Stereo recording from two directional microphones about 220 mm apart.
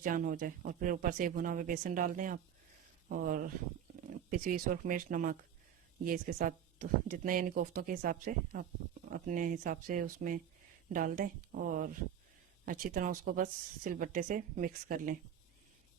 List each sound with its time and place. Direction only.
0.0 s a woman's voice: 40° right (ahead or behind)